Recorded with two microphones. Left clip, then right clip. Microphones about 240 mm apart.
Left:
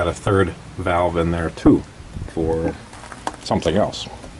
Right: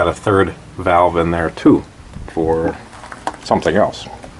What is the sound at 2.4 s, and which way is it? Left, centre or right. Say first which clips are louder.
Speech: right 5 dB; right.